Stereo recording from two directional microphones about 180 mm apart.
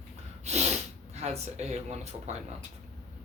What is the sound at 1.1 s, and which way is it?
Speech, 35° right (ahead or behind).